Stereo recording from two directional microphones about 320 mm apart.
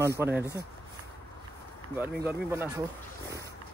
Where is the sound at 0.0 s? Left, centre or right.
Centre.